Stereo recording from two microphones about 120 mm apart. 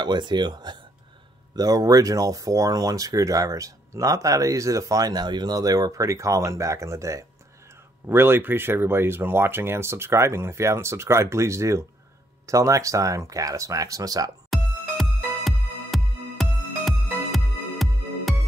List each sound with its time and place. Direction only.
0.0 s speech: 40° right (ahead or behind)
14.5 s music: centre (ahead or behind)